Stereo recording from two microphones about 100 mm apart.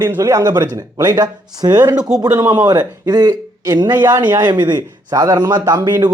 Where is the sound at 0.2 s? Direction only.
35° right (ahead or behind).